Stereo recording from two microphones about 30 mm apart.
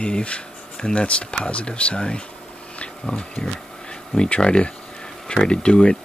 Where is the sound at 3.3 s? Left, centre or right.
Left.